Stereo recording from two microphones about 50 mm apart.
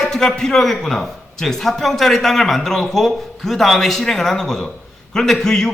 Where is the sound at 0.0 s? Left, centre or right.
Centre.